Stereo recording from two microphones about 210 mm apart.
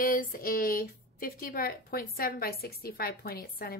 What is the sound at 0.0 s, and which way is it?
Speech, 40° left (ahead or behind).